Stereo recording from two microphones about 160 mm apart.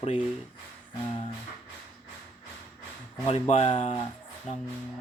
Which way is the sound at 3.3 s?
40° left (ahead or behind).